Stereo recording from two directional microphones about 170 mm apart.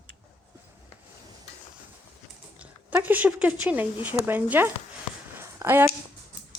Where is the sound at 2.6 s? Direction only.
10° right (ahead or behind).